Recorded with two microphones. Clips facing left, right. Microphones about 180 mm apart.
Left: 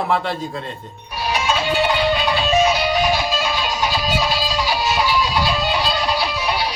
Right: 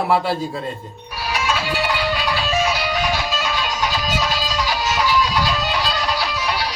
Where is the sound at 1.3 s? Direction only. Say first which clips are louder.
Left 2 dB; 25° left (ahead or behind).